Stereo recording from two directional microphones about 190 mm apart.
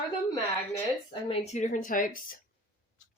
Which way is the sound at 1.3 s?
35° left (ahead or behind).